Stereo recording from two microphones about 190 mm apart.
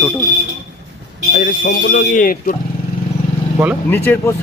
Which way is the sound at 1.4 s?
50° left (ahead or behind).